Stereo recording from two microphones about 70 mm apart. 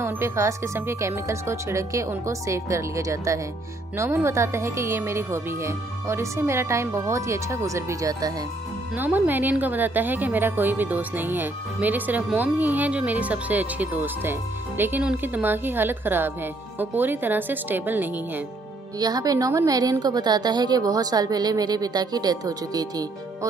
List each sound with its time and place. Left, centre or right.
0.0 s a woman's voice: right
8.9 s a woman's voice: right
18.9 s a woman's voice: right